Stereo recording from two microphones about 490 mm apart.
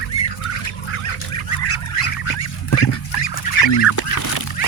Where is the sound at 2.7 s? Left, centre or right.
Left.